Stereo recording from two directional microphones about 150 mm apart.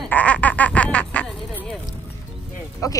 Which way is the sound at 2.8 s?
25° left (ahead or behind).